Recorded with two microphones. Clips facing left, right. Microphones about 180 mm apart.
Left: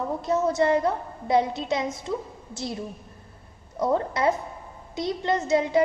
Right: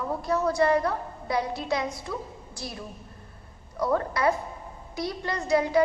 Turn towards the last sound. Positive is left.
turn(degrees=20)  # may be behind; listen again after turning